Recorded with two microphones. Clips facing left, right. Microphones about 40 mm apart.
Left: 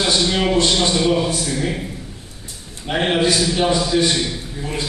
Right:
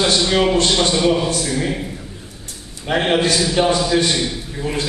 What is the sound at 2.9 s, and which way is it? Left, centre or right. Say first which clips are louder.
Speech: right 3 dB; centre.